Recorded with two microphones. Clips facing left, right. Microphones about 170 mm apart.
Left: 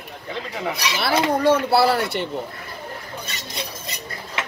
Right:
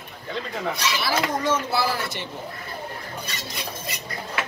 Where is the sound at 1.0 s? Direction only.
60° left (ahead or behind).